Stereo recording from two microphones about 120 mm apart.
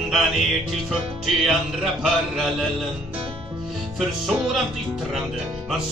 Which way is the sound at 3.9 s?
Centre (ahead or behind).